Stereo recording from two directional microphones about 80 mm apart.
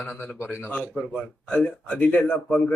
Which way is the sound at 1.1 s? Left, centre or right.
Centre.